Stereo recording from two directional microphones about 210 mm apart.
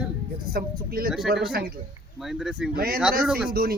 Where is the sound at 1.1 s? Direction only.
Centre (ahead or behind).